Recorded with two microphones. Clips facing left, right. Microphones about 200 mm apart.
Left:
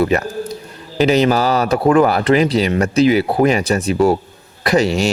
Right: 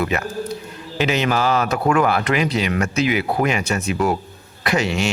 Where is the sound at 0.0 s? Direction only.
35° left (ahead or behind).